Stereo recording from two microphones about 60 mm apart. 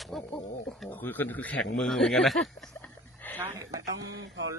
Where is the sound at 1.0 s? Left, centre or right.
Left.